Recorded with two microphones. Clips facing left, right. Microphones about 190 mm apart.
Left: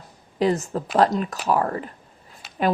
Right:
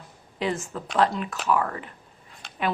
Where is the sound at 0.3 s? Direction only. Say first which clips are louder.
Left 7 dB; 40° left (ahead or behind).